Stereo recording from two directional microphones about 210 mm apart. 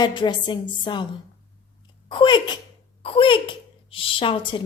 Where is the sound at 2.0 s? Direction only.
20° left (ahead or behind).